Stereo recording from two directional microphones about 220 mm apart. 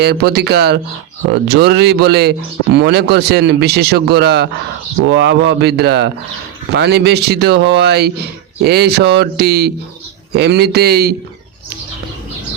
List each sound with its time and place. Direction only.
0.0 s speech: 45° right (ahead or behind)